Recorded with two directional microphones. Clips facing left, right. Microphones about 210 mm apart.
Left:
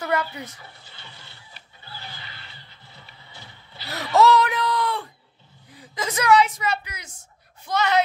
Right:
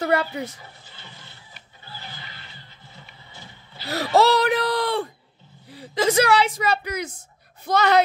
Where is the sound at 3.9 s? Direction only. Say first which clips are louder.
Even; 30° right (ahead or behind).